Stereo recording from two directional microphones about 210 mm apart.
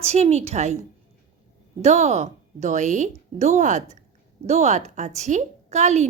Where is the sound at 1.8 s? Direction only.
30° right (ahead or behind).